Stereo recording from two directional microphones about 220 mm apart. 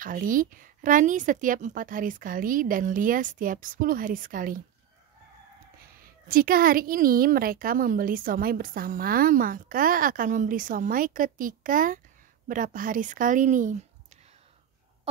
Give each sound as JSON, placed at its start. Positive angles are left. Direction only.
{"t": 0.0, "sound": "a woman's voice", "side_deg": -40}
{"t": 6.2, "sound": "a woman's voice", "side_deg": -40}